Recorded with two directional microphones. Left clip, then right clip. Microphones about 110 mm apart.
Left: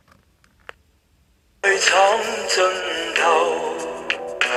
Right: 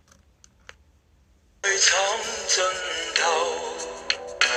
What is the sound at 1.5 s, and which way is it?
Music, 30° left (ahead or behind).